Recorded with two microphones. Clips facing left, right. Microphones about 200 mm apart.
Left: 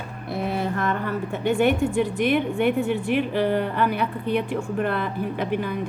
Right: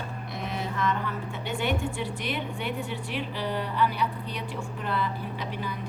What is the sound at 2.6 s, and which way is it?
A woman's voice, 60° left (ahead or behind).